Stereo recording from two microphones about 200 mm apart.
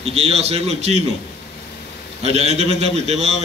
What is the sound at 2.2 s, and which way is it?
A man's voice, 30° right (ahead or behind).